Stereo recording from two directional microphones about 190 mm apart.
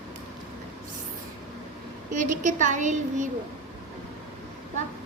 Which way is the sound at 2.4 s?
40° right (ahead or behind).